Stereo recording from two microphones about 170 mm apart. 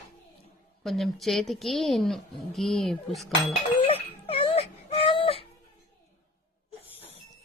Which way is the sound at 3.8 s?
35° left (ahead or behind).